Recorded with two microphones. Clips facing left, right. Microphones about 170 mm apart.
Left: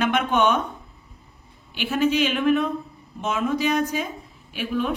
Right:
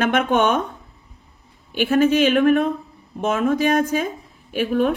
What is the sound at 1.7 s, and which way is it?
A woman's voice, 50° right (ahead or behind).